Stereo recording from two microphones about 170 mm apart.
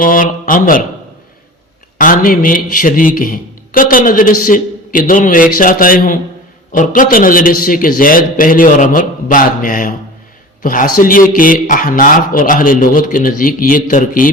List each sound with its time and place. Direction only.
0.0 s speech: 55° left (ahead or behind)
2.0 s a man's voice: 55° left (ahead or behind)